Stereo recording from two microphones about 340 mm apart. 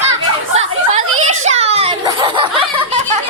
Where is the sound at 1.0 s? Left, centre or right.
Right.